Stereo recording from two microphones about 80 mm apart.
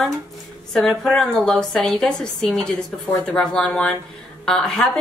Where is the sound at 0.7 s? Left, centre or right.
Centre.